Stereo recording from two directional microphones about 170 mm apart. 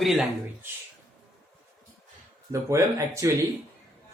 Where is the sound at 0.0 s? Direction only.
Centre (ahead or behind).